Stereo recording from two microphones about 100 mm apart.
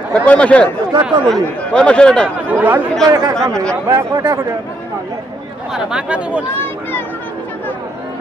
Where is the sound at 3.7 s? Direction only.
30° right (ahead or behind).